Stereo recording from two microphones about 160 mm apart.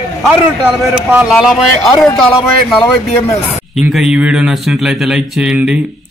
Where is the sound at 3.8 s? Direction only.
5° right (ahead or behind).